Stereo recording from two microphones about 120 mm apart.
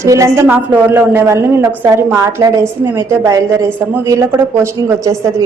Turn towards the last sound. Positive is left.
turn(degrees=-25)  # may be behind; listen again after turning